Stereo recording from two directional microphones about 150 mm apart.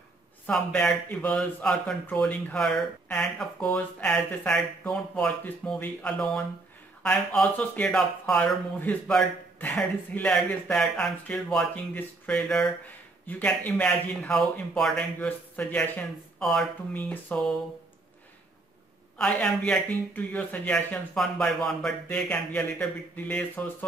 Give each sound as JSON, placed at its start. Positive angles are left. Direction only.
{"t": 0.5, "sound": "speech", "side_deg": 5}
{"t": 19.1, "sound": "speech", "side_deg": 5}